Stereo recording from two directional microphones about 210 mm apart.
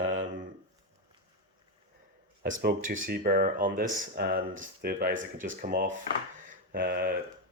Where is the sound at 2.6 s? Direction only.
45° right (ahead or behind).